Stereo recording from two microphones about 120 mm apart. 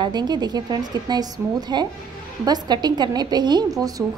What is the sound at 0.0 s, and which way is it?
A woman's voice, 35° right (ahead or behind).